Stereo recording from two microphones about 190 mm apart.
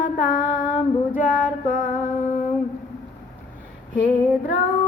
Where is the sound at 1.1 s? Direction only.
45° left (ahead or behind).